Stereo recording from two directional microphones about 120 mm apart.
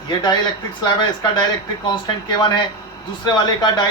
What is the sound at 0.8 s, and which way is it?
Speech, 40° left (ahead or behind).